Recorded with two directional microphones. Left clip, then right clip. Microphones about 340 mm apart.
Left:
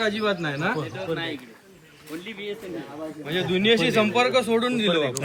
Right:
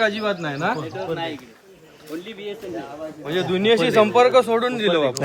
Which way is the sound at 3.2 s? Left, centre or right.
Right.